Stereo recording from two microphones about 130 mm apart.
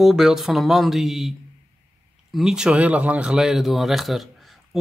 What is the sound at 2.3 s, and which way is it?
Speech, 5° right (ahead or behind).